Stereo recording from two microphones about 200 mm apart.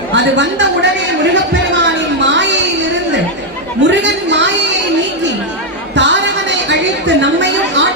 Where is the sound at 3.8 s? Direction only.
60° right (ahead or behind).